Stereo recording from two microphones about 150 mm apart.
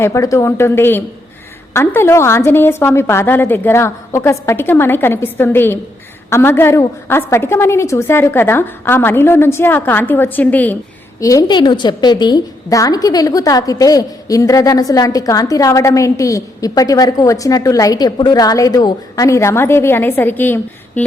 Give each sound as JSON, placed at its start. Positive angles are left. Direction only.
{"t": 0.0, "sound": "a woman's voice", "side_deg": 20}
{"t": 11.2, "sound": "a woman's voice", "side_deg": 20}